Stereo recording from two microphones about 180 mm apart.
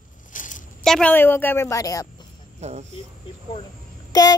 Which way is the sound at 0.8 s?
5° left (ahead or behind).